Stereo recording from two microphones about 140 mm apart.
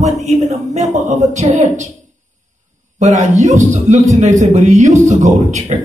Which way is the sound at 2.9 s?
60° right (ahead or behind).